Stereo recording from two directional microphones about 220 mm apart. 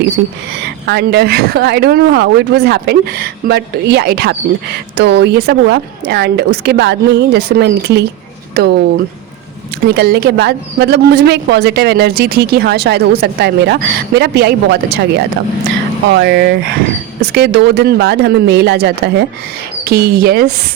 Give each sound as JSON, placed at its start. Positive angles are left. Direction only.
{"t": 0.9, "sound": "speech", "side_deg": -50}
{"t": 9.8, "sound": "speech", "side_deg": -45}